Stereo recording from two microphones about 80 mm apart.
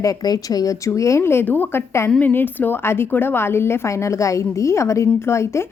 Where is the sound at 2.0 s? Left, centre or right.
Centre.